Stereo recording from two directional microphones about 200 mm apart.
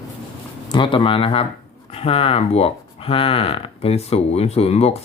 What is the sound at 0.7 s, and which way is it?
Speech, 25° left (ahead or behind).